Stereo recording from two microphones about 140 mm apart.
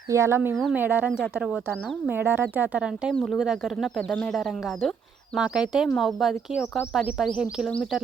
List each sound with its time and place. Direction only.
0.1 s speech: 20° right (ahead or behind); by 8.0 s centre (ahead or behind)